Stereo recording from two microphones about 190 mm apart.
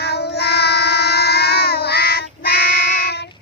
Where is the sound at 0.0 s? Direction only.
60° left (ahead or behind).